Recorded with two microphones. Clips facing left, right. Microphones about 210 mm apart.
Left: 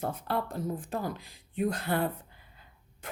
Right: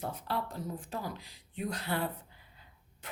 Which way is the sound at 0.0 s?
50° left (ahead or behind).